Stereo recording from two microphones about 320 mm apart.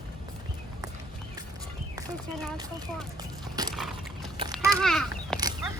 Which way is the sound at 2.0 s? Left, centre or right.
Centre.